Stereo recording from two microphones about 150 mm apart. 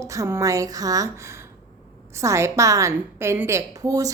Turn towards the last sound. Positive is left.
turn(degrees=-25)  # may be behind; listen again after turning